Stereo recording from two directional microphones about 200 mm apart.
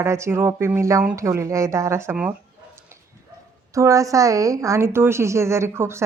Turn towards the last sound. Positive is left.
turn(degrees=-10)  # may be behind; listen again after turning